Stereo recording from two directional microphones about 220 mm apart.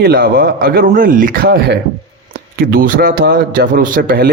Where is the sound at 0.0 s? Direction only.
45° right (ahead or behind).